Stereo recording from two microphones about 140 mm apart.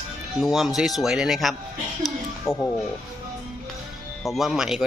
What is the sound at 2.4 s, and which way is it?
Speech, 20° left (ahead or behind).